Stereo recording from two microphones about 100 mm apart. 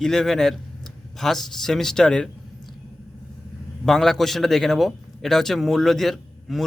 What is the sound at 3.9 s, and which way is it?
A man's voice, centre (ahead or behind).